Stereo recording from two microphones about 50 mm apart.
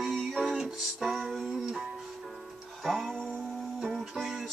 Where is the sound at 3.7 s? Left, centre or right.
Centre.